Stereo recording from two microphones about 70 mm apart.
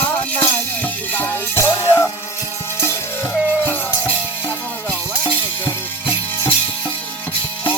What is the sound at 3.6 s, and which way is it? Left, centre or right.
Music, left.